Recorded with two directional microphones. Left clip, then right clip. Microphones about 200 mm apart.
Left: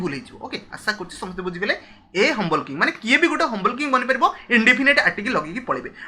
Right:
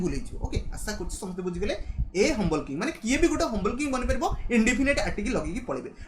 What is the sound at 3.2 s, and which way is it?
Speech, 10° right (ahead or behind).